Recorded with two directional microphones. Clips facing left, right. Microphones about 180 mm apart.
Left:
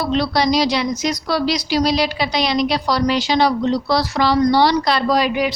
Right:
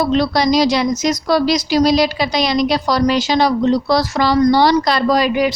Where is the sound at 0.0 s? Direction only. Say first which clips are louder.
Right 3 dB; 45° right (ahead or behind).